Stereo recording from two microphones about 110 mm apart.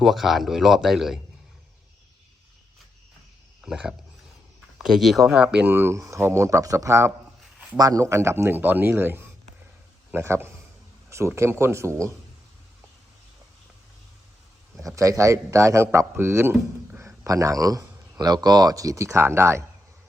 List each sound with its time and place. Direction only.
0.0 s speech: centre (ahead or behind)
3.6 s a man's voice: 5° right (ahead or behind); by 12.1 s 25° right (ahead or behind)
14.9 s speech: 30° right (ahead or behind)
17.2 s speech: 30° right (ahead or behind)